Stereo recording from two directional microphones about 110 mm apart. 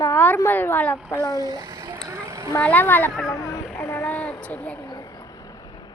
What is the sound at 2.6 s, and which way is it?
Speech, 15° left (ahead or behind).